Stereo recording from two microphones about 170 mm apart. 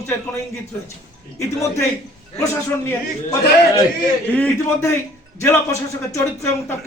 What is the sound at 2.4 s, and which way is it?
Speech, 15° left (ahead or behind).